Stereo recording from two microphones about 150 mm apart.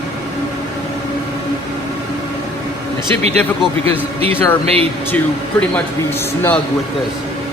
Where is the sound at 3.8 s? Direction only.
40° right (ahead or behind).